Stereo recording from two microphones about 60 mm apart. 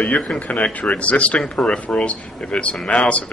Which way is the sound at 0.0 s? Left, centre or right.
Centre.